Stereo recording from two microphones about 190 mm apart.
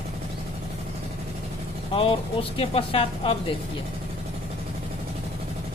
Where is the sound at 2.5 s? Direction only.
30° left (ahead or behind).